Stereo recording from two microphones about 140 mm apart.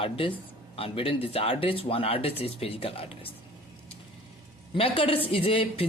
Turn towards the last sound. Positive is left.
turn(degrees=40)  # may be behind; listen again after turning